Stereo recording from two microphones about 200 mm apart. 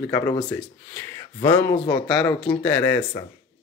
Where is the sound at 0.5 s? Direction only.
10° left (ahead or behind).